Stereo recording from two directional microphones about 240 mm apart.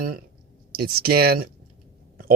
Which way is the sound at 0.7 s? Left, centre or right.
Right.